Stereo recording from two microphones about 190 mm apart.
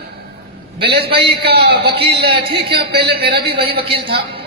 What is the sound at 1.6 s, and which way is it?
A man's voice, 60° right (ahead or behind).